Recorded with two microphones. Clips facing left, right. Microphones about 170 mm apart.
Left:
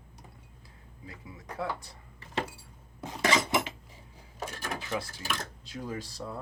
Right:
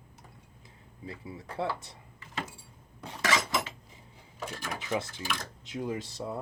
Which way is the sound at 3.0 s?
25° left (ahead or behind).